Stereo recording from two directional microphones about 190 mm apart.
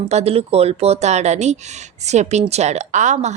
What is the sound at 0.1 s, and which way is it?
A woman's voice, 35° right (ahead or behind).